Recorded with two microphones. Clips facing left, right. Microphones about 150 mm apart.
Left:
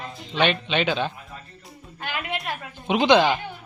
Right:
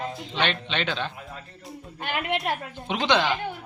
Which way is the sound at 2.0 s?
20° right (ahead or behind).